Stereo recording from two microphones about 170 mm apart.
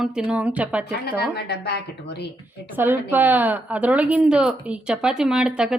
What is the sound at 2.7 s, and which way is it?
A woman's voice, 10° right (ahead or behind).